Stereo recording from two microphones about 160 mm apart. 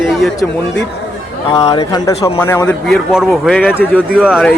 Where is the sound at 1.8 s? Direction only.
20° left (ahead or behind).